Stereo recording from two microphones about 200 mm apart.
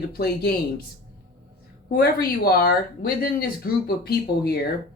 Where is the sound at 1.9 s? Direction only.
50° left (ahead or behind).